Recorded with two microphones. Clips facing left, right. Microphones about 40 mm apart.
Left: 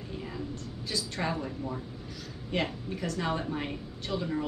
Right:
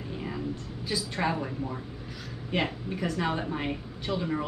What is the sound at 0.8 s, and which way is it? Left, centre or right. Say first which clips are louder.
Speech: right 3 dB; centre.